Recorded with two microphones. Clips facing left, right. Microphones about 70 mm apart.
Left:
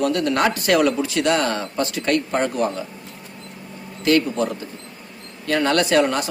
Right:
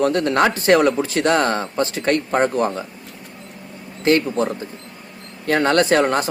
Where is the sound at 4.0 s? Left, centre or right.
Right.